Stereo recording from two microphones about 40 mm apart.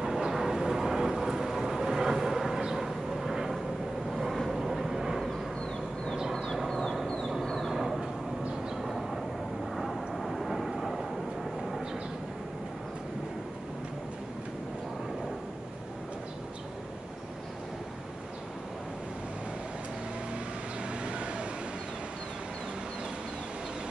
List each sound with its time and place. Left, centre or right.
0.0 s vehicle: centre
6.3 s a sound: centre
6.7 s fowl: centre
7.4 s vehicle: centre
7.7 s vehicle: centre
21.0 s vehicle: right